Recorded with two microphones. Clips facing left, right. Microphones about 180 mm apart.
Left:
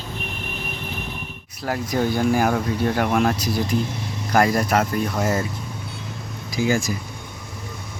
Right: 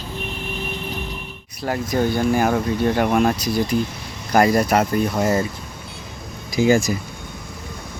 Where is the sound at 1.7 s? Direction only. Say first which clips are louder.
Right 2 dB; 5° left (ahead or behind).